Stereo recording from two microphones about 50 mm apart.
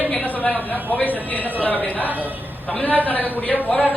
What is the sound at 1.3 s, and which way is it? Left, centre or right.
A woman's voice, left.